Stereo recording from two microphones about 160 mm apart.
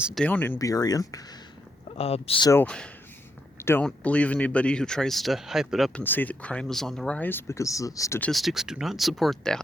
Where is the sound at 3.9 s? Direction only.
10° left (ahead or behind).